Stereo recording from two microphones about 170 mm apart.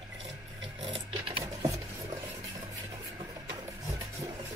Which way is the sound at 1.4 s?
20° right (ahead or behind).